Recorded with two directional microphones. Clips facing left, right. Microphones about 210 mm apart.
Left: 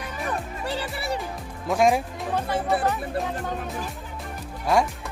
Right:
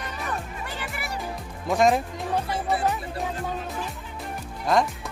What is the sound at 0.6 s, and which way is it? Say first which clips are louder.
Music: left 6 dB; 30° left (ahead or behind).